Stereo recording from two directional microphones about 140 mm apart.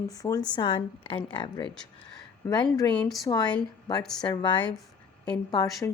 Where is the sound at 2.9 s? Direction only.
Centre (ahead or behind).